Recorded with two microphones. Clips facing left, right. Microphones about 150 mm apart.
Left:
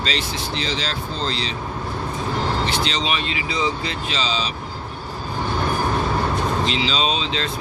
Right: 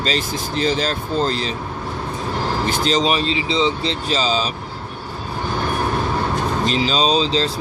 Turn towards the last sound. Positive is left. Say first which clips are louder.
# right 6 dB
turn(degrees=-35)  # may be behind; listen again after turning